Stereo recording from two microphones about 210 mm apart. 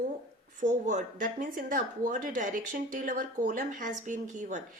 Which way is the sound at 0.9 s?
35° right (ahead or behind).